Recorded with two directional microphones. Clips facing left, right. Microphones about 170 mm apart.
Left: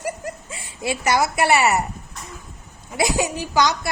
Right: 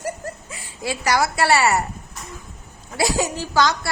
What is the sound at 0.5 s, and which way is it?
Speech, 25° left (ahead or behind).